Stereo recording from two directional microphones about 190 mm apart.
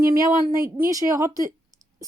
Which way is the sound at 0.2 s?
20° right (ahead or behind).